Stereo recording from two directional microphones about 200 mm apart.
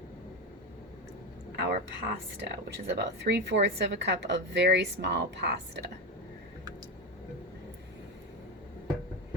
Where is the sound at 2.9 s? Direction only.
60° right (ahead or behind).